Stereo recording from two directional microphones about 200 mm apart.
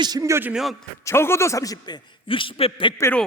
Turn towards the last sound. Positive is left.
turn(degrees=10)  # may be behind; listen again after turning